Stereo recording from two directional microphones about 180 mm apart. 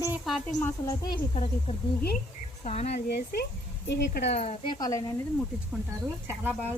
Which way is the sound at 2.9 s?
60° left (ahead or behind).